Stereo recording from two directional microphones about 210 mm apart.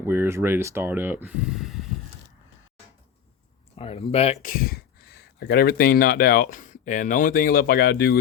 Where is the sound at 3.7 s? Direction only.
30° left (ahead or behind).